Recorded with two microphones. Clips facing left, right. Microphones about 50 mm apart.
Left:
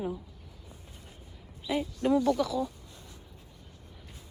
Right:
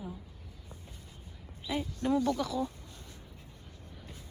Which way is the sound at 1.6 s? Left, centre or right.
Left.